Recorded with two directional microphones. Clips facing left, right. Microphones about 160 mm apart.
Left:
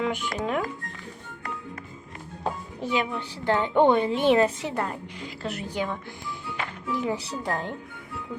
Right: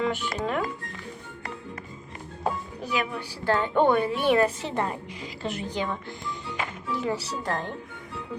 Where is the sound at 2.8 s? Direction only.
25° left (ahead or behind).